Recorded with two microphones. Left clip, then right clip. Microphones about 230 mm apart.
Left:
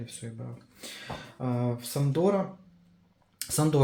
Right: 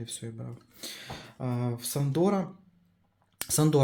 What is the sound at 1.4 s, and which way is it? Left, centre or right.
Speech, right.